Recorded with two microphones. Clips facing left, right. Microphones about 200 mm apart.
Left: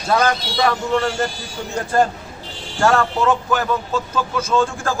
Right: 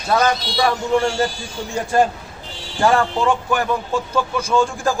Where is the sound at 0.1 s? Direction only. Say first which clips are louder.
Even; 10° right (ahead or behind).